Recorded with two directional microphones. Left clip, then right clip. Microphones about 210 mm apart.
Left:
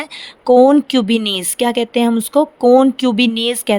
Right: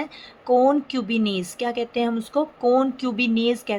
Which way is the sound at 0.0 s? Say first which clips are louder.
Left 9 dB; 55° left (ahead or behind).